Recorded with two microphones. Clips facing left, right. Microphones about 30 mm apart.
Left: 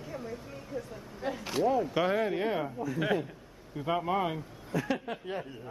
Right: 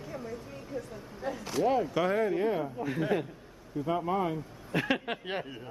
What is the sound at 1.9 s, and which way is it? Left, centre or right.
Speech, centre.